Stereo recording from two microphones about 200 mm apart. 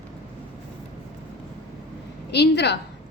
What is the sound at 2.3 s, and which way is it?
Speech, 55° left (ahead or behind).